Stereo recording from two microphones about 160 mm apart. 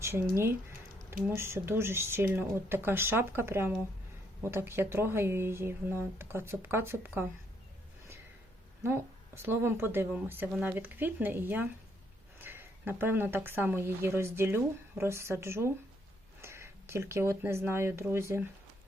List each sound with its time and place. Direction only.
0.0 s speech: 15° right (ahead or behind)
8.8 s speech: 15° right (ahead or behind)